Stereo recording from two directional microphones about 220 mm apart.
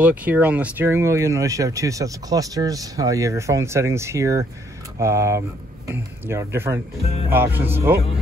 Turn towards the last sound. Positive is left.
turn(degrees=-10)  # may be behind; listen again after turning